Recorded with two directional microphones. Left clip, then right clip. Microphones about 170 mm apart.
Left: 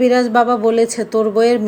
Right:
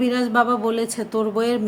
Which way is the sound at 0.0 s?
15° left (ahead or behind).